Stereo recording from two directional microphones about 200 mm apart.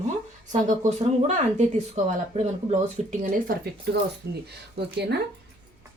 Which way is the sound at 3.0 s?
45° right (ahead or behind).